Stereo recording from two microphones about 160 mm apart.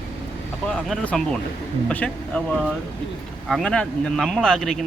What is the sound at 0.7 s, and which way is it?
Speech, 5° left (ahead or behind).